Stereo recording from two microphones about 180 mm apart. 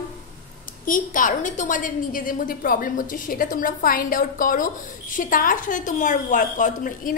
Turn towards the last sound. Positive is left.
turn(degrees=45)  # may be behind; listen again after turning